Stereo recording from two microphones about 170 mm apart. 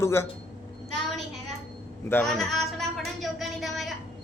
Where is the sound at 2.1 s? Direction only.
5° left (ahead or behind).